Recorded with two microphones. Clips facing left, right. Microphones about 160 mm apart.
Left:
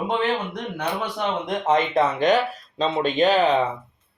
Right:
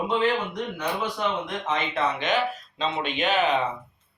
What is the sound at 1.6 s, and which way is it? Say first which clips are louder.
Speech: left 7 dB; 40° left (ahead or behind).